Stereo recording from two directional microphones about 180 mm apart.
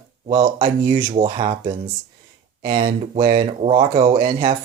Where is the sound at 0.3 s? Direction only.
30° right (ahead or behind).